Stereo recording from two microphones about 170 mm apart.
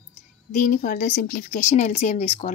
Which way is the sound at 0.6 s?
50° left (ahead or behind).